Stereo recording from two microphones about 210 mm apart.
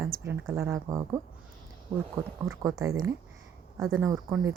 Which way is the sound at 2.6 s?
15° right (ahead or behind).